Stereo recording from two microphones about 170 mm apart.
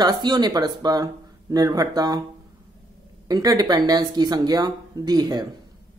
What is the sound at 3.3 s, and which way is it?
Speech, 20° right (ahead or behind).